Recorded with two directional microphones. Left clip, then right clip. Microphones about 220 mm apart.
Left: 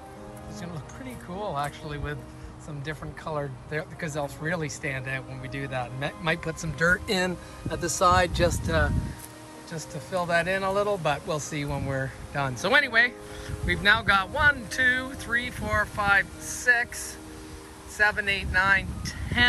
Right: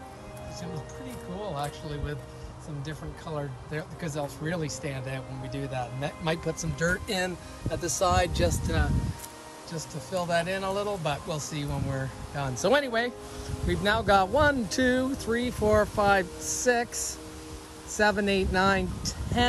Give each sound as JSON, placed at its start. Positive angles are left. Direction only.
{"t": 1.4, "sound": "speech", "side_deg": -10}